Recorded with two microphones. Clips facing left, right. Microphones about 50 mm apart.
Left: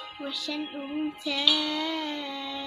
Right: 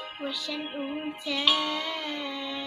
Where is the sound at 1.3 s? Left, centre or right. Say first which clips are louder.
Right 1 dB; right.